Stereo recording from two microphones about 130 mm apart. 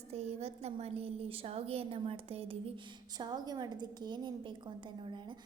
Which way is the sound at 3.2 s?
30° right (ahead or behind).